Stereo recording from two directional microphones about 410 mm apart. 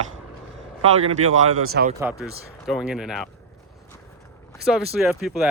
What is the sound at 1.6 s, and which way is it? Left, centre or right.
Speech, right.